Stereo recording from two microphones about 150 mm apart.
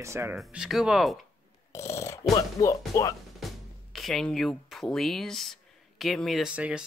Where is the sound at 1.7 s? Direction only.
20° left (ahead or behind).